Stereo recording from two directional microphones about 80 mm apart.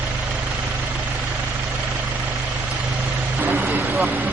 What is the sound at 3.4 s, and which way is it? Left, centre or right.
Vehicle, right.